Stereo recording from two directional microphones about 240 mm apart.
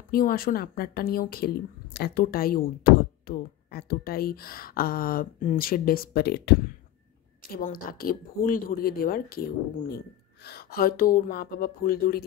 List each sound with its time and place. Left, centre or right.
0.1 s speech: left
7.5 s speech: left